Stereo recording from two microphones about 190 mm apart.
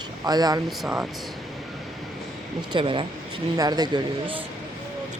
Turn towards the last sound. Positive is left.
turn(degrees=-25)  # may be behind; listen again after turning